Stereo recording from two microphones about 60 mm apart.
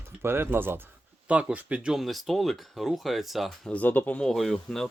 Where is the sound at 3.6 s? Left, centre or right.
Left.